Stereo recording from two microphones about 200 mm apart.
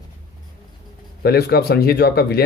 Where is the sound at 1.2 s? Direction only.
50° left (ahead or behind).